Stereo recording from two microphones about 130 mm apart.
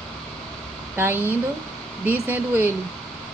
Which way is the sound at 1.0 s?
15° right (ahead or behind).